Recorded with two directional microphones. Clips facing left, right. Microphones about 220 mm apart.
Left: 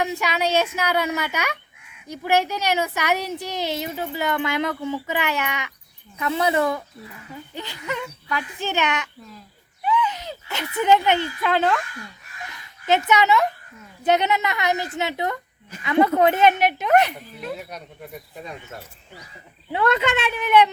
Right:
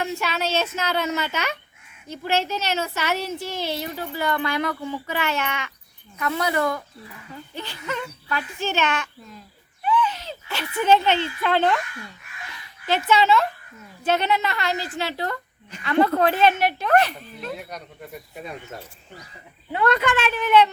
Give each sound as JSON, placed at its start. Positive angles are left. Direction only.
{"t": 0.0, "sound": "a woman's voice", "side_deg": 15}
{"t": 9.8, "sound": "a sound", "side_deg": 20}
{"t": 11.4, "sound": "speech", "side_deg": 5}
{"t": 12.8, "sound": "a woman's voice", "side_deg": 20}
{"t": 17.5, "sound": "speech", "side_deg": 0}
{"t": 19.7, "sound": "a woman's voice", "side_deg": 20}